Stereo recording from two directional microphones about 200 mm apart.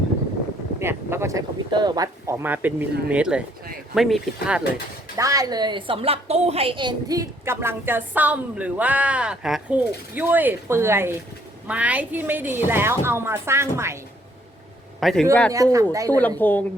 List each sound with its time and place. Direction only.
0.8 s a woman's voice: 10° right (ahead or behind)
5.1 s a woman's voice: 15° right (ahead or behind)
15.0 s speech: 5° left (ahead or behind)
15.5 s a woman's voice: 15° right (ahead or behind)
16.4 s speech: 10° left (ahead or behind)